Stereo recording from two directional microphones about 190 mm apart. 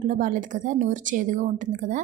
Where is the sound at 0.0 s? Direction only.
40° right (ahead or behind).